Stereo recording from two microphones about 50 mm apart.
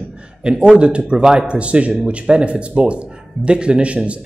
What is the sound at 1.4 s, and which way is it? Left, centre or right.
Speech, right.